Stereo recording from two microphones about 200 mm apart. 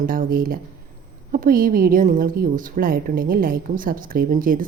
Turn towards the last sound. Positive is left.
turn(degrees=-45)  # may be behind; listen again after turning